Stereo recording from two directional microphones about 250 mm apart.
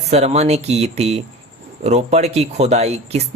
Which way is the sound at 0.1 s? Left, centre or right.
Right.